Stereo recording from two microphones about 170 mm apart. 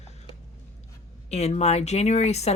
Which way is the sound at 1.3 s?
40° left (ahead or behind).